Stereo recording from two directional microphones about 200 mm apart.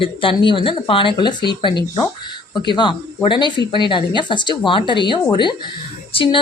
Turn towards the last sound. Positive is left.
turn(degrees=25)  # may be behind; listen again after turning